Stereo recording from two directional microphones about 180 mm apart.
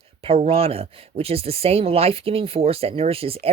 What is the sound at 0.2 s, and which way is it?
Speech, 30° right (ahead or behind).